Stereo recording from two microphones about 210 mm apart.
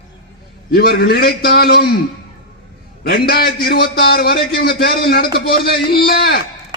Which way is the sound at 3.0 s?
45° left (ahead or behind).